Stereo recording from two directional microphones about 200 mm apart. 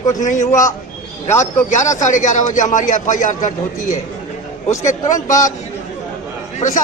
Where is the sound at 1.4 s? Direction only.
35° left (ahead or behind).